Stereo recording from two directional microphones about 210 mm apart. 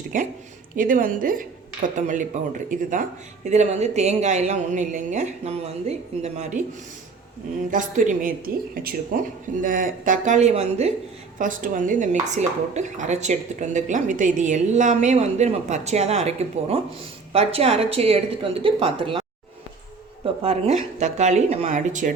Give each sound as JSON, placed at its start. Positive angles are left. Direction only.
{"t": 0.1, "sound": "speech", "side_deg": -40}
{"t": 7.7, "sound": "a woman's voice", "side_deg": -35}
{"t": 20.2, "sound": "speech", "side_deg": -30}